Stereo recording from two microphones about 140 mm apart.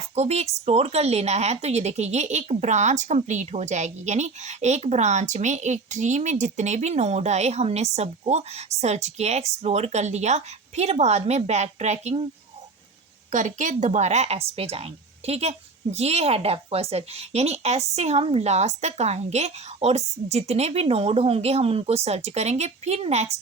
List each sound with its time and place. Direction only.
0.2 s speech: 50° right (ahead or behind)
13.3 s speech: 60° right (ahead or behind)